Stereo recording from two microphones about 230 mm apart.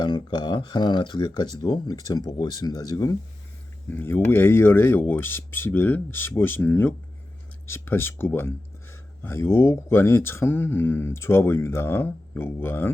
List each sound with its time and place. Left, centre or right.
0.0 s speech: centre